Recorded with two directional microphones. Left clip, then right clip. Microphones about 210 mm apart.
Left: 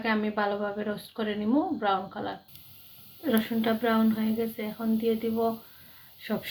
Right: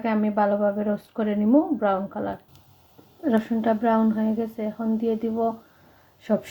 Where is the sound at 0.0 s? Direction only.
40° right (ahead or behind).